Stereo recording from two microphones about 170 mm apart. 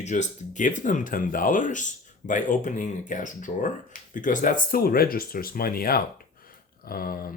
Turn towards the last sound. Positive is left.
turn(degrees=60)  # may be behind; listen again after turning